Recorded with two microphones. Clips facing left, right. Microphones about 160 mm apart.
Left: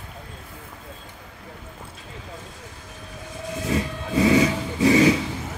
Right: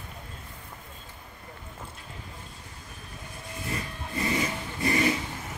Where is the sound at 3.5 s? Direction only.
90° left.